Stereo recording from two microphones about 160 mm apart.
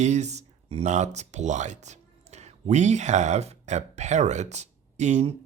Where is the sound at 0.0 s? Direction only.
45° right (ahead or behind).